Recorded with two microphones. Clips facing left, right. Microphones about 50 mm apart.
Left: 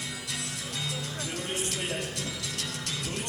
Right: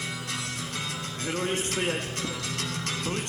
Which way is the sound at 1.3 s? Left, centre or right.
Right.